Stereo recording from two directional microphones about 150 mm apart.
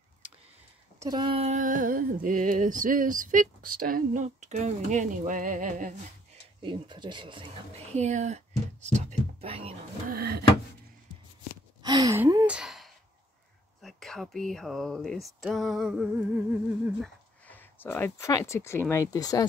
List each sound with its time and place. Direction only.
0.9 s speech: 25° right (ahead or behind)
1.6 s a sound: 65° right (ahead or behind)
6.6 s speech: 30° right (ahead or behind)
7.9 s speech: 50° right (ahead or behind)
10.1 s a sound: 90° right
11.8 s gasp: 25° right (ahead or behind)
12.4 s a sound: 5° right (ahead or behind)
13.7 s speech: centre (ahead or behind)
16.1 s humming: 10° right (ahead or behind)
17.5 s speech: 15° left (ahead or behind)